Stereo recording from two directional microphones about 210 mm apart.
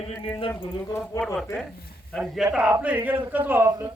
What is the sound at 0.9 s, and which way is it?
Speech, 10° left (ahead or behind).